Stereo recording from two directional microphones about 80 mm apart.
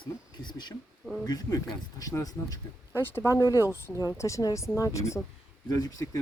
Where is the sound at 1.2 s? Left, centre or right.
Left.